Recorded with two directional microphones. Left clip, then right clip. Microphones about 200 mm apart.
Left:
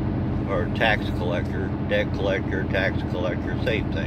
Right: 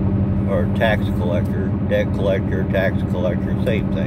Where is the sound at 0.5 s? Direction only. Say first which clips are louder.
Right 3 dB; centre (ahead or behind).